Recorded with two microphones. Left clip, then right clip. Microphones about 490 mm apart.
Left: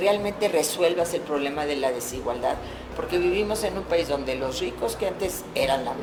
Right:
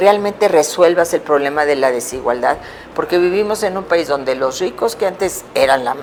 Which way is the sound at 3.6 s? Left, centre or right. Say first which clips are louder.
Right 9 dB; right.